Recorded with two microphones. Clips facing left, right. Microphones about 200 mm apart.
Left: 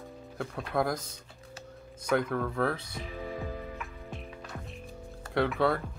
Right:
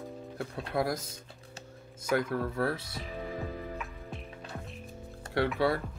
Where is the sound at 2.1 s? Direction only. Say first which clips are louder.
Left 1 dB; 5° right (ahead or behind).